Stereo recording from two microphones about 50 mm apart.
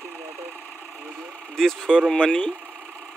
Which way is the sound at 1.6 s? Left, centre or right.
Centre.